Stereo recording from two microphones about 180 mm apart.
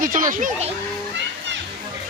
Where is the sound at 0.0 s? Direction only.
50° right (ahead or behind).